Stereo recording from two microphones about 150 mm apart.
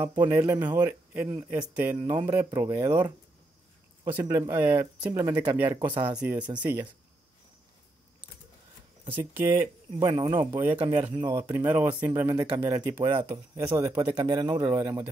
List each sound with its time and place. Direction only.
0.0 s speech: 15° right (ahead or behind)
9.1 s speech: 15° right (ahead or behind)
10.0 s speech: 30° right (ahead or behind)
10.3 s speech: 15° right (ahead or behind)